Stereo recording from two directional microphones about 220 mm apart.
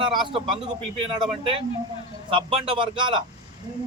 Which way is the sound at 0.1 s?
20° right (ahead or behind).